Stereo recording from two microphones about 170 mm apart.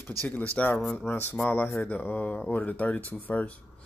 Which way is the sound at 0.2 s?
10° left (ahead or behind).